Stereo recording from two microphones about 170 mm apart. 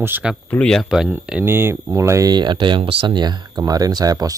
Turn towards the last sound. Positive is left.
turn(degrees=-20)  # may be behind; listen again after turning